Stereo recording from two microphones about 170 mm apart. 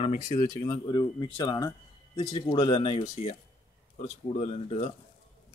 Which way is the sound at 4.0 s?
45° left (ahead or behind).